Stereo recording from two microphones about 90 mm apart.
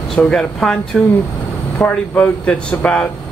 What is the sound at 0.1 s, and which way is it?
Speech, 10° left (ahead or behind).